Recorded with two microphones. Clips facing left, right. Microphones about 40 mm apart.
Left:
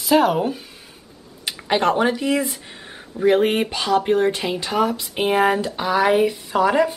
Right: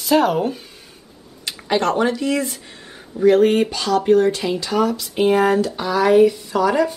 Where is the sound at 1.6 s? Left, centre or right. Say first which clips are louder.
Even; centre.